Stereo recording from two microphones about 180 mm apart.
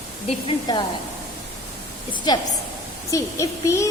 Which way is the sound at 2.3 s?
20° left (ahead or behind).